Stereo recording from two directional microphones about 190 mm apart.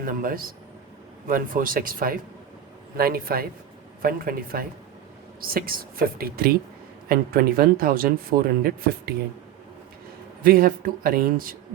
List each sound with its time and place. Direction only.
0.0 s speech: 50° right (ahead or behind)
8.3 s speech: 40° right (ahead or behind)
8.6 s speech: 55° right (ahead or behind)
10.4 s speech: 50° right (ahead or behind)